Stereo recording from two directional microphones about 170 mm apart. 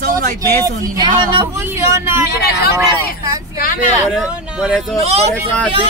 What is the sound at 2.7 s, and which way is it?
Speech, 20° right (ahead or behind).